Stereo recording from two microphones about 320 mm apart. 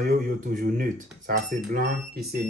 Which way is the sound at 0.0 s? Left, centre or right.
Right.